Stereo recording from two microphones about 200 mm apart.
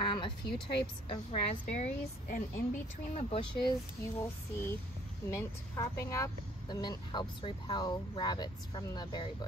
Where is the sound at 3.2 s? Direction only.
25° left (ahead or behind).